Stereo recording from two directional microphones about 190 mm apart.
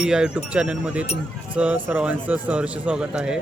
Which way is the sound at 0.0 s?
5° right (ahead or behind).